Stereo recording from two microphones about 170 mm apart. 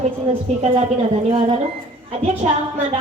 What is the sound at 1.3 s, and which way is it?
A woman's voice, 40° right (ahead or behind).